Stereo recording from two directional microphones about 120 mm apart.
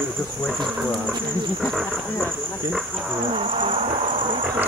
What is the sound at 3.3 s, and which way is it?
Cricket, 50° right (ahead or behind).